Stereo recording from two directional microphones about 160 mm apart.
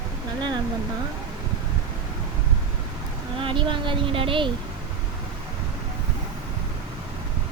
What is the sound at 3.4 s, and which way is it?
Speech, 30° right (ahead or behind).